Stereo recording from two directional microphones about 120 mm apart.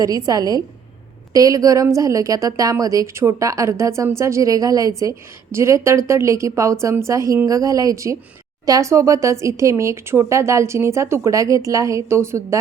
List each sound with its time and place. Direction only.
0.0 s speech: 30° right (ahead or behind)